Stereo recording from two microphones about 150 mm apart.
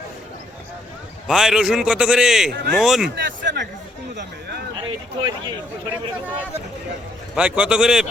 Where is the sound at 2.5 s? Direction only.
90° right.